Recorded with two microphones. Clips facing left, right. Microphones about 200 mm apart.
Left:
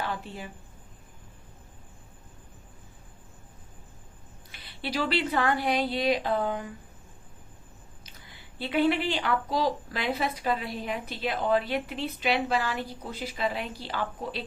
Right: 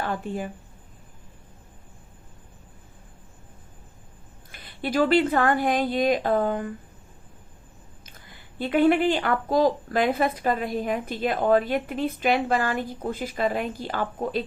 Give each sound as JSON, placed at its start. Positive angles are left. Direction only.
{"t": 0.0, "sound": "speech", "side_deg": -50}
{"t": 4.5, "sound": "speech", "side_deg": -50}
{"t": 8.5, "sound": "speech", "side_deg": -50}